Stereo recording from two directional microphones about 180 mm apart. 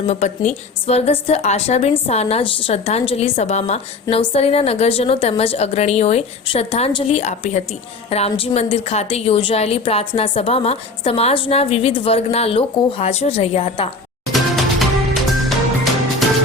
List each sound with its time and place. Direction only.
0.1 s a woman's voice: 40° left (ahead or behind)
14.3 s music: centre (ahead or behind)